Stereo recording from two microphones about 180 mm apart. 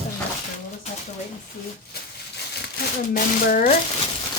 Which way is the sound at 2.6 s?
55° left (ahead or behind).